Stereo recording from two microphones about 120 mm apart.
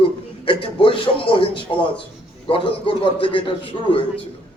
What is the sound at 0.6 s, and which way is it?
A man's voice, 45° left (ahead or behind).